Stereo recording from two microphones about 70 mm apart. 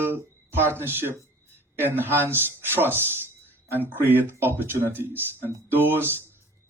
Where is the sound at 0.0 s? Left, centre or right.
Right.